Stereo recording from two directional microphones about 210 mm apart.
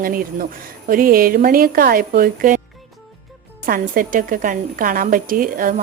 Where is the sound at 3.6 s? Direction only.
40° right (ahead or behind).